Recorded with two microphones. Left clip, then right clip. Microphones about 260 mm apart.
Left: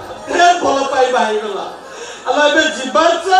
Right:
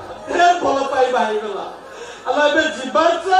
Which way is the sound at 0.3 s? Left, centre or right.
Centre.